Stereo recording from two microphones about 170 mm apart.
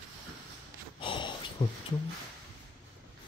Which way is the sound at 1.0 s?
30° left (ahead or behind).